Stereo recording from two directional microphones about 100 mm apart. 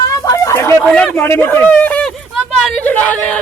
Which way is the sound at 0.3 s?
30° left (ahead or behind).